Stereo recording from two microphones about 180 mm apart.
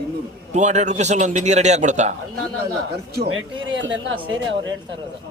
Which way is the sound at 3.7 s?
90° right.